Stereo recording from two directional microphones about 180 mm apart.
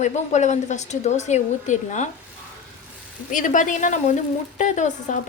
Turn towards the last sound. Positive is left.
turn(degrees=40)  # may be behind; listen again after turning